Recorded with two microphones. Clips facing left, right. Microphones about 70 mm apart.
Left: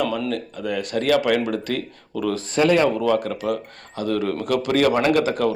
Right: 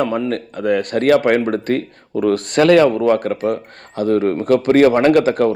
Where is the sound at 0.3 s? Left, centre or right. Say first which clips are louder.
Right 7 dB; right.